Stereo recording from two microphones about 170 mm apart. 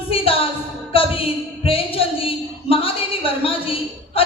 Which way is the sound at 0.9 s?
35° left (ahead or behind).